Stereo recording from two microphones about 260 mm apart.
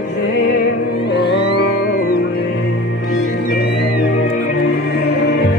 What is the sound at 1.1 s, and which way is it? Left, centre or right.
Music, left.